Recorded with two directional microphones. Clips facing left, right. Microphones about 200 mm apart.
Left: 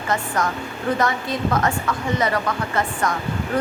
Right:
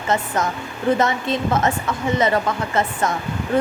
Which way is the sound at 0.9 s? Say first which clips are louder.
Right 2 dB; 25° right (ahead or behind).